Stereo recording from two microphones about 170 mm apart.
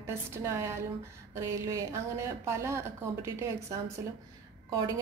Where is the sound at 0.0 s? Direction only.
15° right (ahead or behind).